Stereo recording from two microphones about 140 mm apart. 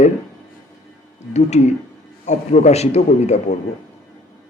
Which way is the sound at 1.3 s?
55° left (ahead or behind).